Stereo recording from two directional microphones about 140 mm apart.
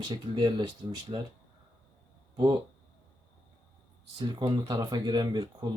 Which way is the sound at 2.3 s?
30° right (ahead or behind).